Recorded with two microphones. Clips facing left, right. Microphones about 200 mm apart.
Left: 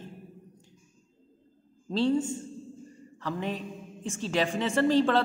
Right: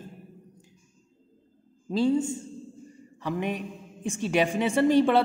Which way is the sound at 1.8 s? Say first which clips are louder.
Right 2 dB; 10° right (ahead or behind).